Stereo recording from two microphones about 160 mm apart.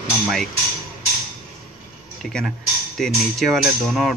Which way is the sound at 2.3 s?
Centre (ahead or behind).